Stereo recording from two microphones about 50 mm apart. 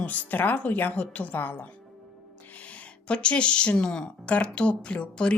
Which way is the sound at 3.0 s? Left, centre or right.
Left.